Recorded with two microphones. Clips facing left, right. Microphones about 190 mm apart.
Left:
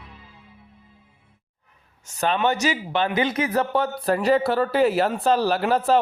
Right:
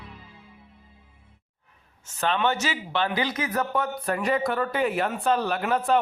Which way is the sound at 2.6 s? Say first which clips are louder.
Left 4 dB; 15° left (ahead or behind).